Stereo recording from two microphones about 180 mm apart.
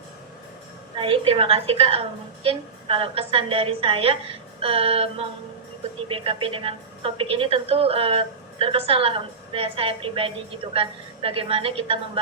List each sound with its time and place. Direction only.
0.9 s a woman's voice: 30° right (ahead or behind)